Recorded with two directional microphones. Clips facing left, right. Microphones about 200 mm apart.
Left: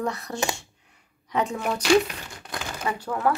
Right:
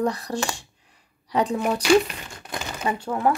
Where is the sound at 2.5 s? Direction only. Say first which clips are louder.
Right 3 dB; 25° right (ahead or behind).